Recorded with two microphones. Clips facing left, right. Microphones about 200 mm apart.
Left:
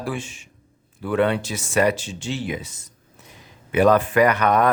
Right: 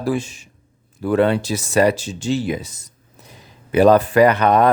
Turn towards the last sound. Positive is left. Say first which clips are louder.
# right 4 dB
turn(degrees=-30)  # may be behind; listen again after turning